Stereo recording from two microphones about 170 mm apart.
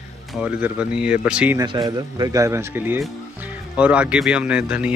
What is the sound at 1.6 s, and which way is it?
A man's voice, 25° right (ahead or behind).